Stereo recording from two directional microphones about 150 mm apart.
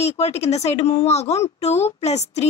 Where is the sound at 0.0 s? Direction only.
45° left (ahead or behind).